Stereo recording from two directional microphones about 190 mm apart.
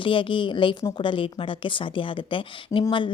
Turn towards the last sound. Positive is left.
turn(degrees=25)  # may be behind; listen again after turning